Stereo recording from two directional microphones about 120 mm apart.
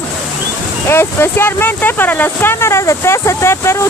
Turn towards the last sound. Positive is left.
turn(degrees=25)  # may be behind; listen again after turning